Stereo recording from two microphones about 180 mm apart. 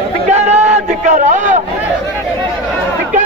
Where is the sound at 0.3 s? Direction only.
40° right (ahead or behind).